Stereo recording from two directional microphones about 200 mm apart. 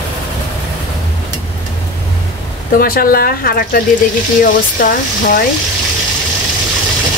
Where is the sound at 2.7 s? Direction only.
45° left (ahead or behind).